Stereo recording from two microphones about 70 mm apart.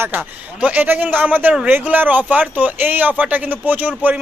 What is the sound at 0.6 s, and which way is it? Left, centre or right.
A man's voice, right.